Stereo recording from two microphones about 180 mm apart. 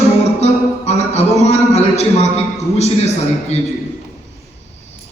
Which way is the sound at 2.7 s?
35° left (ahead or behind).